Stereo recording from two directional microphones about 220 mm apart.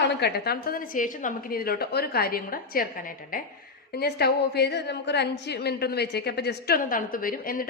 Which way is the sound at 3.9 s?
50° left (ahead or behind).